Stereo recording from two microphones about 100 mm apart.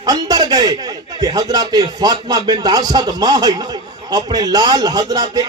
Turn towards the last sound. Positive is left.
turn(degrees=-40)  # may be behind; listen again after turning